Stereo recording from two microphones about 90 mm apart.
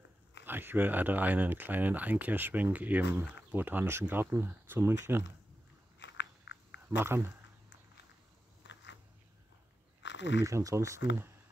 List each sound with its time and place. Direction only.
0.5 s speech: 20° right (ahead or behind)
7.0 s speech: 30° right (ahead or behind)
10.4 s speech: 35° right (ahead or behind)